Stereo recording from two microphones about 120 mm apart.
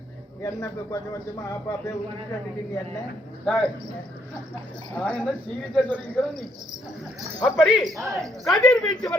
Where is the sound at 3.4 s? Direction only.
5° left (ahead or behind).